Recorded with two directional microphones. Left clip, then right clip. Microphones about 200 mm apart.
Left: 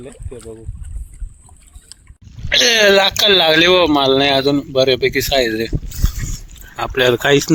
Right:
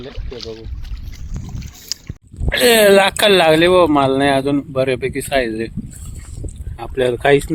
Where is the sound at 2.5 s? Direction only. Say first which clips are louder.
Even; 10° right (ahead or behind).